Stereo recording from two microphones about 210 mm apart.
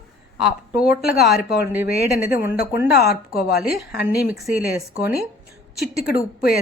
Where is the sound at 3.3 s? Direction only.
Centre (ahead or behind).